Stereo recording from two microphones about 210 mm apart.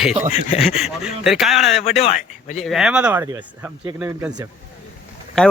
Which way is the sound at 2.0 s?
35° left (ahead or behind).